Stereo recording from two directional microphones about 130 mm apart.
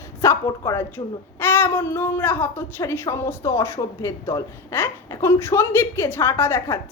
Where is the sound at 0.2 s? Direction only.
25° left (ahead or behind).